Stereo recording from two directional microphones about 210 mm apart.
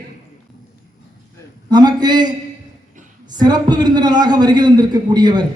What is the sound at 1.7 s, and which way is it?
A man's voice, 20° right (ahead or behind).